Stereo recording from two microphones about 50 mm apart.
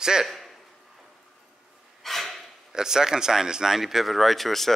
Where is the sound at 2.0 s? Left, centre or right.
Centre.